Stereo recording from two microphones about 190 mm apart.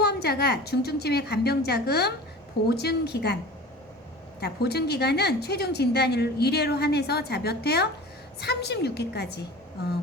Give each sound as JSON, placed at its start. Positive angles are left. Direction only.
{"t": 0.0, "sound": "a woman's voice", "side_deg": 60}
{"t": 4.4, "sound": "a woman's voice", "side_deg": 60}